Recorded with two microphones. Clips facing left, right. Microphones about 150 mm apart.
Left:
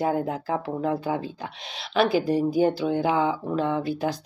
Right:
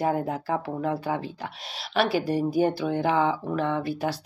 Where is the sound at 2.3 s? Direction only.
25° left (ahead or behind).